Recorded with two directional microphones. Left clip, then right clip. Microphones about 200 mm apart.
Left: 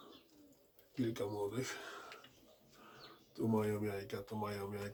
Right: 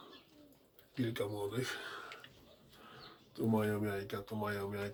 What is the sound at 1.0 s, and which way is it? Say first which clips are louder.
Speech: right 1 dB; 10° right (ahead or behind).